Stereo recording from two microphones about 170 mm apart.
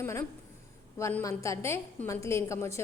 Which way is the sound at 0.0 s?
15° left (ahead or behind).